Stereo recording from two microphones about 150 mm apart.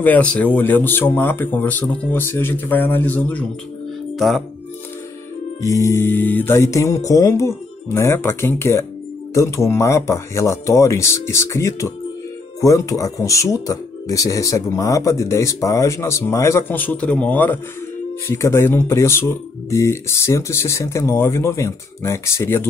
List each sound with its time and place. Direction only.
0.0 s speech: 10° left (ahead or behind)
4.1 s music: centre (ahead or behind)
5.6 s speech: 20° left (ahead or behind)